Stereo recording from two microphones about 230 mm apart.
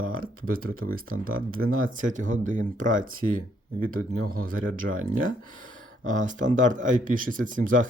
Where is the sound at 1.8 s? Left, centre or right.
Right.